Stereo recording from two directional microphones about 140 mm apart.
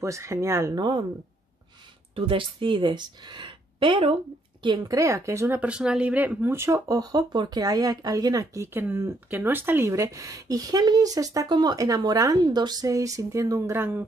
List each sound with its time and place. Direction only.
0.0 s speech: 20° right (ahead or behind)
2.1 s speech: 40° right (ahead or behind)
4.9 s speech: 20° right (ahead or behind)